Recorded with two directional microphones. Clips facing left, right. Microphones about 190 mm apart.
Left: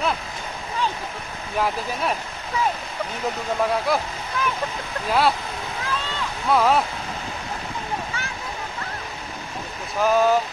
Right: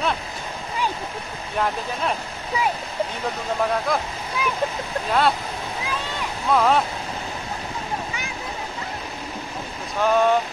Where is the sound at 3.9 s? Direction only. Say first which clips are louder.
Left 1 dB; 5° left (ahead or behind).